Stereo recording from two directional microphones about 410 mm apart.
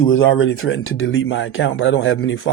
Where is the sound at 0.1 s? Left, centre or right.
Left.